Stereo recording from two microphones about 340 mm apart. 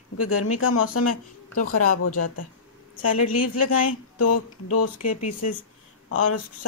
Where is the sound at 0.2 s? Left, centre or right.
Left.